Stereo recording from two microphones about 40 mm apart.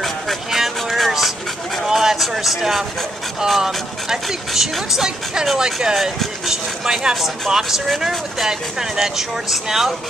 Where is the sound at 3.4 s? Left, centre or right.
Centre.